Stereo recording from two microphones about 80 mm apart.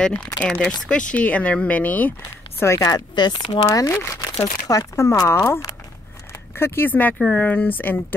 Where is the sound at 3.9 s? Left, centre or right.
Left.